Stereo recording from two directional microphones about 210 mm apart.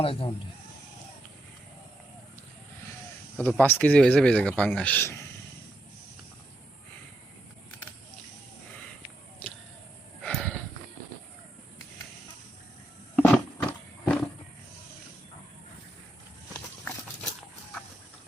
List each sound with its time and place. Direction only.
0.0 s speech: 25° left (ahead or behind)
3.3 s speech: 10° left (ahead or behind)
9.4 s a sound: 5° left (ahead or behind)
10.2 s horse: 5° left (ahead or behind)
13.1 s roaring cats: 5° left (ahead or behind)